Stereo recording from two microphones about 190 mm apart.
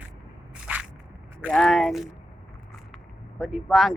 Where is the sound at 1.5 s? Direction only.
5° left (ahead or behind).